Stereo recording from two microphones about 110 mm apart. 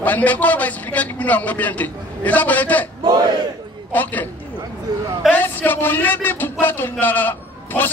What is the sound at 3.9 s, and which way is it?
Speech, 15° left (ahead or behind).